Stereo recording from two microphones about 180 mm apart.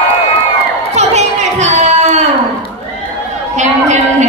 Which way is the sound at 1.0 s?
40° right (ahead or behind).